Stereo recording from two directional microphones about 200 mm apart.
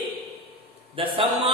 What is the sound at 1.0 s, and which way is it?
Speech, 30° right (ahead or behind).